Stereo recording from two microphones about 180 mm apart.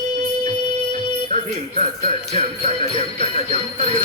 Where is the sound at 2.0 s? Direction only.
35° right (ahead or behind).